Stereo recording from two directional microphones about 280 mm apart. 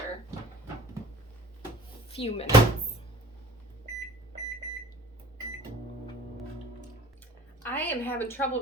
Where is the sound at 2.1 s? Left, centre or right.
Left.